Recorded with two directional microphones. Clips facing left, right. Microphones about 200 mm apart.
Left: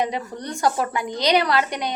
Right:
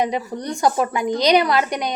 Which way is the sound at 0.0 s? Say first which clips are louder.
Right 3 dB; 15° right (ahead or behind).